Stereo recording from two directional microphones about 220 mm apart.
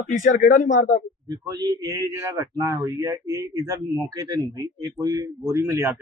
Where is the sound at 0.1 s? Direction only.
35° left (ahead or behind).